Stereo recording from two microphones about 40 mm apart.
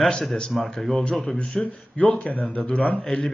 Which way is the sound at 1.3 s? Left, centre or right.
Left.